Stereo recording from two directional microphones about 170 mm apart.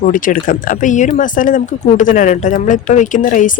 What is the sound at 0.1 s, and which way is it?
Speech, 50° left (ahead or behind).